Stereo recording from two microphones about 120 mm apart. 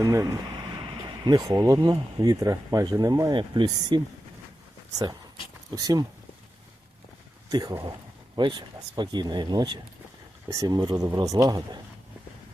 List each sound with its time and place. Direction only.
0.0 s speech: 25° right (ahead or behind)
5.7 s speech: 30° right (ahead or behind)
7.5 s speech: 30° right (ahead or behind)